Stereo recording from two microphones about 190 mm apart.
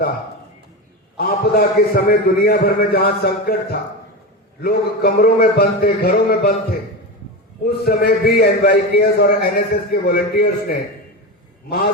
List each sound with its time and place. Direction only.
1.1 s a man's voice: 55° left (ahead or behind)
7.6 s a man's voice: 55° left (ahead or behind)